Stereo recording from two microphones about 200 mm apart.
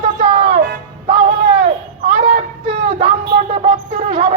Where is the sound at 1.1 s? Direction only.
35° right (ahead or behind).